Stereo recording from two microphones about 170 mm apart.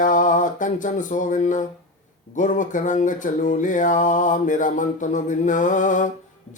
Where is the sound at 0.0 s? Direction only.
50° left (ahead or behind).